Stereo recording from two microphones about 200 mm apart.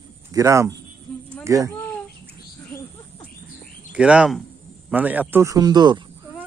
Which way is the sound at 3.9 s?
5° right (ahead or behind).